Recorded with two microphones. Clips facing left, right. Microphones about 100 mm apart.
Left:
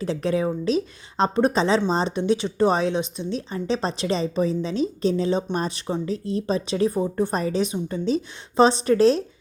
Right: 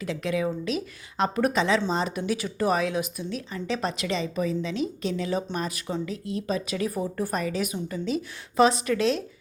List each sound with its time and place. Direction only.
0.0 s a woman's voice: 35° left (ahead or behind)